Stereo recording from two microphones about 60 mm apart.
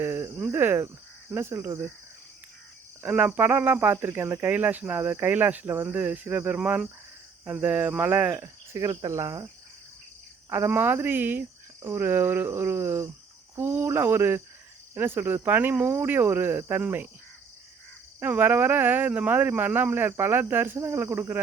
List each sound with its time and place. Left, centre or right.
0.0 s cricket: right
0.5 s speech: right
3.0 s speech: right
8.4 s cricket: right
8.9 s cricket: right
10.7 s speech: right
18.2 s speech: right